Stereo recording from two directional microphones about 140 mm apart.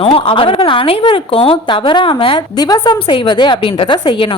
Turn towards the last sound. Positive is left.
turn(degrees=35)  # may be behind; listen again after turning